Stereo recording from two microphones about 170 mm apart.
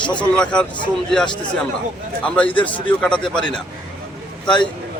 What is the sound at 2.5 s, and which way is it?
Speech, 30° left (ahead or behind).